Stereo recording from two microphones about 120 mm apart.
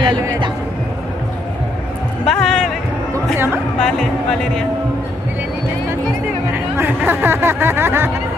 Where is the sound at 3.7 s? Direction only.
Centre (ahead or behind).